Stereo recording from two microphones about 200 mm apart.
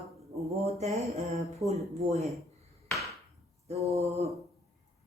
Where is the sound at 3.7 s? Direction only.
30° right (ahead or behind).